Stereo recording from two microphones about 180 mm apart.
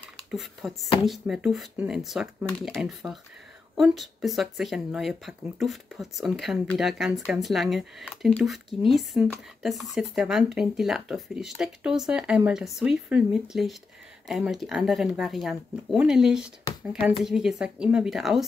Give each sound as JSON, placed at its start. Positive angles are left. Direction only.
{"t": 0.3, "sound": "speech", "side_deg": 0}
{"t": 16.7, "sound": "a sound", "side_deg": 20}
{"t": 17.2, "sound": "speech", "side_deg": 0}